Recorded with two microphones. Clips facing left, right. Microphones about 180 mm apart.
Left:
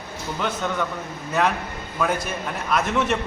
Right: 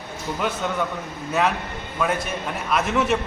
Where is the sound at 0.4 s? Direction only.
5° right (ahead or behind).